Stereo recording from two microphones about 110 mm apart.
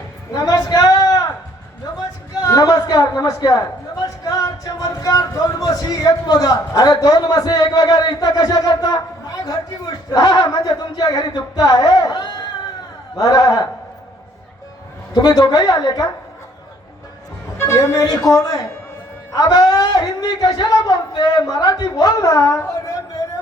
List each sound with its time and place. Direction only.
0.4 s a sound: 40° left (ahead or behind)
4.2 s speech: 35° left (ahead or behind)
15.1 s speech: 35° left (ahead or behind)
17.6 s a man's voice: 25° left (ahead or behind)